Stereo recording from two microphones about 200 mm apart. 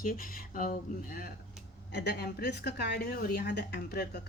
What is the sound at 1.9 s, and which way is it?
Speech, 60° left (ahead or behind).